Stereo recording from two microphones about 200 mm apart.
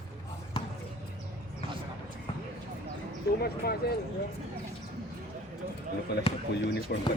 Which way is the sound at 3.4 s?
50° left (ahead or behind).